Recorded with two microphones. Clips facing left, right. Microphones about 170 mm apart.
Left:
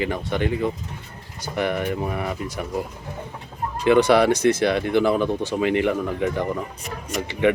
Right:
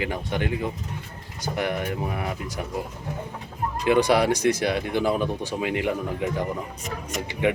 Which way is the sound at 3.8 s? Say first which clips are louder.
Left 4 dB; 10° right (ahead or behind).